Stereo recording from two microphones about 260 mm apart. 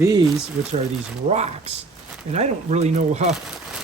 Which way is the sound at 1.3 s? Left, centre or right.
Right.